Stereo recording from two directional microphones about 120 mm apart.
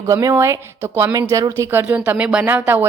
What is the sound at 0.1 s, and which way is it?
Speech, 25° right (ahead or behind).